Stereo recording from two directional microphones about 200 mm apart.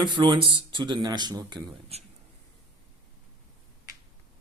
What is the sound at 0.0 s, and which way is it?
Speech, 25° right (ahead or behind).